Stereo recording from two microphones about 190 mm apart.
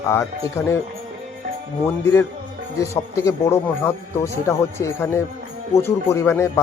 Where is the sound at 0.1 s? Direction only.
15° left (ahead or behind).